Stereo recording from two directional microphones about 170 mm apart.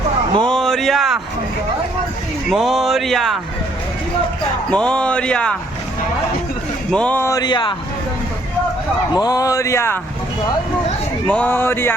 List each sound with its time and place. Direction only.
0.4 s a sound: centre (ahead or behind)
2.5 s speech: centre (ahead or behind)
4.7 s speech: 5° left (ahead or behind)
6.9 s speech: 10° left (ahead or behind); by 7.8 s 25° left (ahead or behind)
9.1 s speech: 20° left (ahead or behind)
11.3 s speech: 10° left (ahead or behind)